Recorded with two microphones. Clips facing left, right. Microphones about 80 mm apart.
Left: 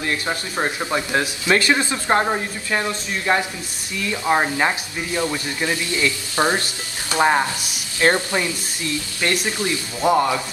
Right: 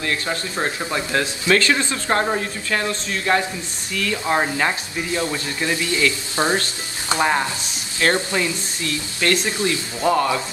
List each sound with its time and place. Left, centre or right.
0.0 s speech: left
9.4 s speech: right
9.7 s speech: left